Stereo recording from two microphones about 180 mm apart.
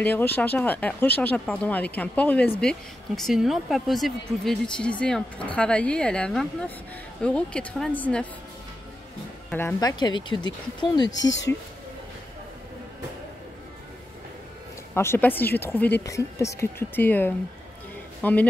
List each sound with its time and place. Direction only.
0.0 s speech: 10° left (ahead or behind)
9.5 s speech: 10° left (ahead or behind)
9.8 s speech: 25° left (ahead or behind)
11.1 s speech: 90° left
15.0 s speech: 10° left (ahead or behind)